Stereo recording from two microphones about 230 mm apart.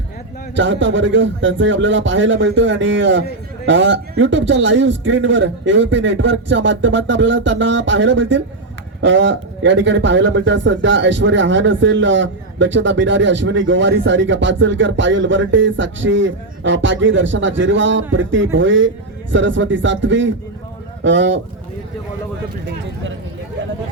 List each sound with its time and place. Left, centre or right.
0.5 s a man's voice: right